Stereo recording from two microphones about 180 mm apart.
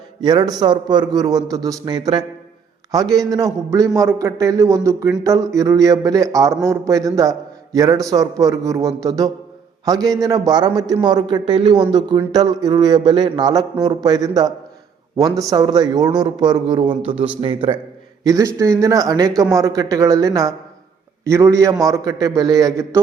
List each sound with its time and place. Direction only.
0.2 s speech: 25° right (ahead or behind)